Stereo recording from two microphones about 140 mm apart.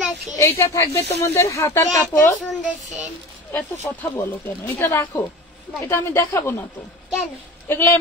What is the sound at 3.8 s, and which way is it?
Speech, 25° left (ahead or behind).